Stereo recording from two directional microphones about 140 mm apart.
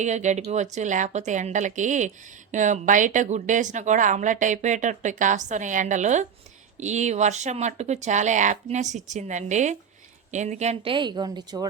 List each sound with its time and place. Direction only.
0.0 s speech: 60° right (ahead or behind)
10.9 s a woman's voice: 30° right (ahead or behind)